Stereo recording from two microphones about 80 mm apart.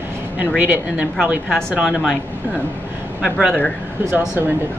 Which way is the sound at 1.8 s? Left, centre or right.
Centre.